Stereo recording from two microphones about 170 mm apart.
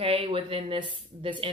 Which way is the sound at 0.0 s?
35° right (ahead or behind).